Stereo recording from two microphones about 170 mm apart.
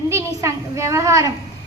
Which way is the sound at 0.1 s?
15° right (ahead or behind).